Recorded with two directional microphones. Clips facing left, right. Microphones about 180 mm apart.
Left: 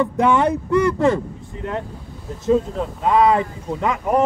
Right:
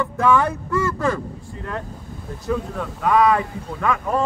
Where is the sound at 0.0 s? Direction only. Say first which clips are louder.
Left 2 dB; 20° left (ahead or behind).